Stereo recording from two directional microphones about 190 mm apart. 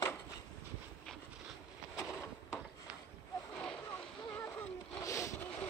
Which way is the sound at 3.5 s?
5° left (ahead or behind).